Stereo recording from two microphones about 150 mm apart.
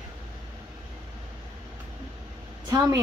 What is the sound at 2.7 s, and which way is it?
Speech, 20° right (ahead or behind).